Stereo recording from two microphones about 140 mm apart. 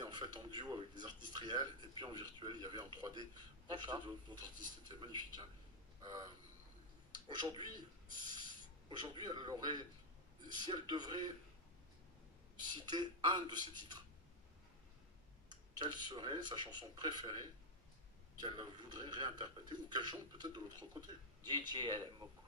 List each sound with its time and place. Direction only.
0.0 s a man's voice: 30° right (ahead or behind)
6.0 s a sound: 25° right (ahead or behind)
7.2 s a man's voice: 35° right (ahead or behind)
12.6 s a man's voice: 30° right (ahead or behind)
16.1 s a man's voice: 30° right (ahead or behind)